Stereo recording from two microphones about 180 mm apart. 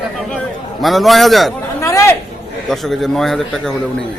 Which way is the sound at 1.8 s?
15° left (ahead or behind).